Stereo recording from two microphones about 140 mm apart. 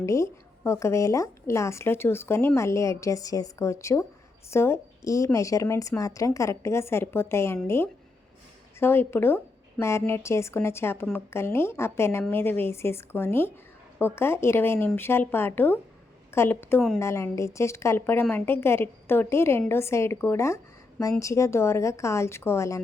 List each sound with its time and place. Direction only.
0.0 s a woman's voice: 20° left (ahead or behind)